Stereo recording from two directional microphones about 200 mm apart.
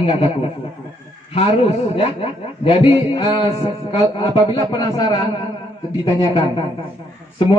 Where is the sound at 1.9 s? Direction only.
30° left (ahead or behind).